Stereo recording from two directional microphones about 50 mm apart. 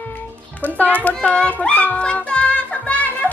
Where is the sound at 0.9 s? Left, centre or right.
Left.